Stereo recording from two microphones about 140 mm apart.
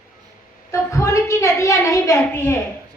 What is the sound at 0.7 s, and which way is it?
Speech, 20° left (ahead or behind).